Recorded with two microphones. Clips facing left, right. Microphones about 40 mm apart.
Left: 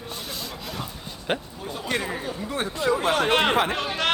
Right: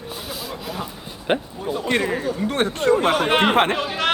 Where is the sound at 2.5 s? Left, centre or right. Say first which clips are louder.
Right 5 dB; right.